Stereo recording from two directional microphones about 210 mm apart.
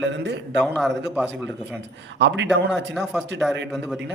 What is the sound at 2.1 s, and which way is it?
Speech, 60° right (ahead or behind).